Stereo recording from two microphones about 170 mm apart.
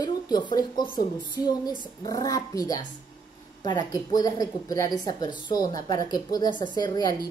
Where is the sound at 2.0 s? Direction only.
20° left (ahead or behind).